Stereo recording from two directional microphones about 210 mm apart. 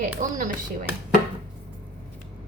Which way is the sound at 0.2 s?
40° right (ahead or behind).